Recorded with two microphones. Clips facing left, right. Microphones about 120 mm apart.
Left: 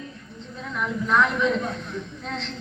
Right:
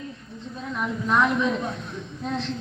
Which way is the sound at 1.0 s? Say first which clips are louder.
Even; 20° right (ahead or behind).